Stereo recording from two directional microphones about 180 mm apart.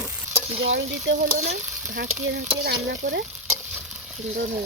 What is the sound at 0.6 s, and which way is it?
Speech, 90° right.